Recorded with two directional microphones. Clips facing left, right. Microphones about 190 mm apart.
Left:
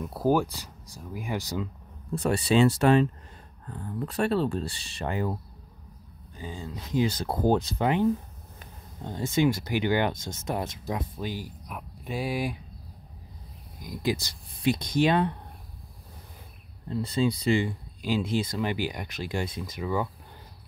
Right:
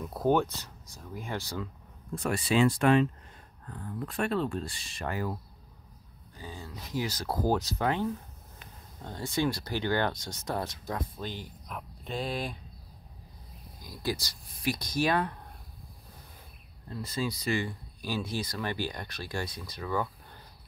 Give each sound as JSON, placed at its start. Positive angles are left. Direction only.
{"t": 0.0, "sound": "speech", "side_deg": 5}
{"t": 2.1, "sound": "speech", "side_deg": 35}
{"t": 13.7, "sound": "speech", "side_deg": 20}
{"t": 16.9, "sound": "speech", "side_deg": 25}